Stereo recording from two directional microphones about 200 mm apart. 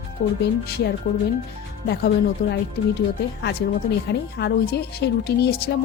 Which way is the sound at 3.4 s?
55° left (ahead or behind).